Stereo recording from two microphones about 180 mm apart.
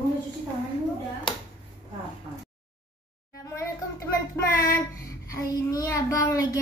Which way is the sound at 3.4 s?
15° left (ahead or behind).